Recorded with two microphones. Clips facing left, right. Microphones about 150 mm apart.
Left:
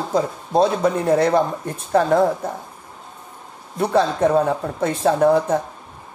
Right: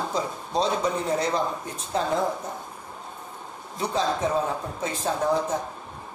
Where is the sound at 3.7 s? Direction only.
60° left (ahead or behind).